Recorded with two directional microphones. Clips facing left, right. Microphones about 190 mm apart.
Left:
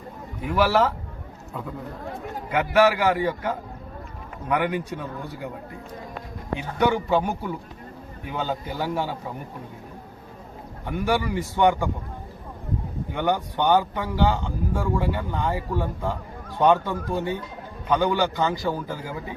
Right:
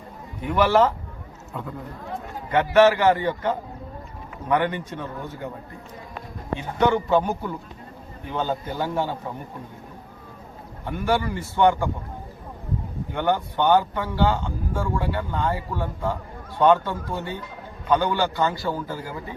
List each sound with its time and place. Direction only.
0.4 s a man's voice: 5° left (ahead or behind)
2.5 s speech: 5° left (ahead or behind)
6.6 s speech: 15° left (ahead or behind)
10.8 s speech: 15° left (ahead or behind)
13.1 s speech: 15° left (ahead or behind)